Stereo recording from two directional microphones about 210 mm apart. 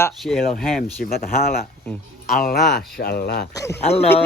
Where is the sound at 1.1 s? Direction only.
45° left (ahead or behind).